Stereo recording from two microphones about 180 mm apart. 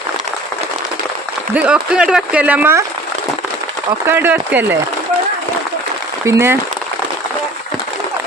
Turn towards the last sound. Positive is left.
turn(degrees=-15)  # may be behind; listen again after turning